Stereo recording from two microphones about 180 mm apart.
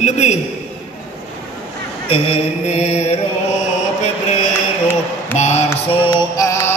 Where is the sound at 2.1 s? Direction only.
35° left (ahead or behind).